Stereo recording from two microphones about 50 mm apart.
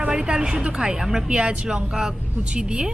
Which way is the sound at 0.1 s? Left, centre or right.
Centre.